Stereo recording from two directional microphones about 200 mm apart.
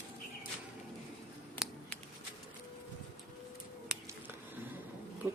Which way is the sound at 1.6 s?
5° right (ahead or behind).